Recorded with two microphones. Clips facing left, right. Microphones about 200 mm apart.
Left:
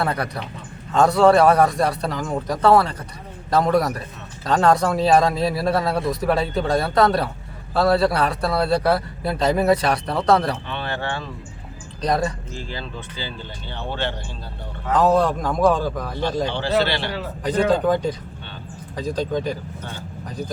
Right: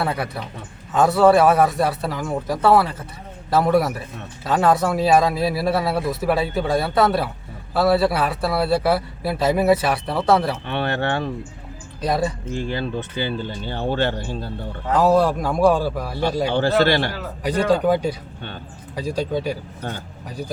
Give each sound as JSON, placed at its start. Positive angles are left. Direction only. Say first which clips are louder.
{"t": 0.0, "sound": "speech", "louder": "even", "side_deg": -5}
{"t": 10.7, "sound": "speech", "louder": "right 5 dB", "side_deg": -60}
{"t": 12.0, "sound": "speech", "louder": "even", "side_deg": -5}
{"t": 12.5, "sound": "speech", "louder": "right 8 dB", "side_deg": -60}
{"t": 14.9, "sound": "a man's voice", "louder": "right 1 dB", "side_deg": -10}
{"t": 16.8, "sound": "speech", "louder": "right 6 dB", "side_deg": -50}
{"t": 17.2, "sound": "a man's voice", "louder": "left 1 dB", "side_deg": -10}